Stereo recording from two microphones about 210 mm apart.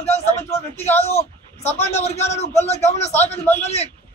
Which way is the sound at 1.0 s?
30° left (ahead or behind).